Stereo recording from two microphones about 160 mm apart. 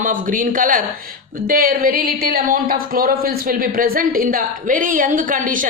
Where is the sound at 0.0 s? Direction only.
55° right (ahead or behind).